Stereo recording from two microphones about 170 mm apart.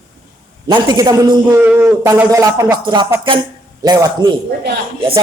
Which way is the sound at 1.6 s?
10° right (ahead or behind).